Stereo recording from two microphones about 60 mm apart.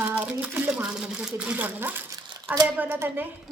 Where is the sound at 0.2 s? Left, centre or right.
Right.